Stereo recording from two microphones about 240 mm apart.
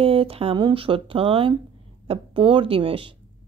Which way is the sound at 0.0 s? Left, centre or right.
Right.